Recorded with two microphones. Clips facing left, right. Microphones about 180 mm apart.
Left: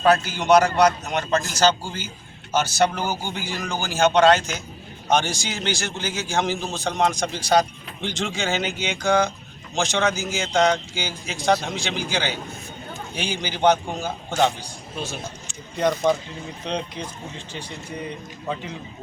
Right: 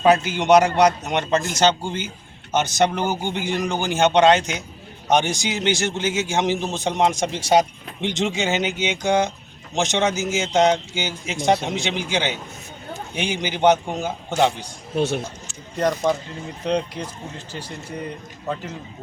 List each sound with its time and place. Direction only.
0.3 s a man's voice: 20° right (ahead or behind)
3.2 s speech: 60° right (ahead or behind)
3.7 s a man's voice: 20° right (ahead or behind)
14.9 s speech: 70° right (ahead or behind)
15.8 s speech: centre (ahead or behind)